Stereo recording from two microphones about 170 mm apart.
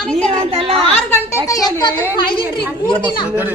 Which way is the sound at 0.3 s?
35° right (ahead or behind).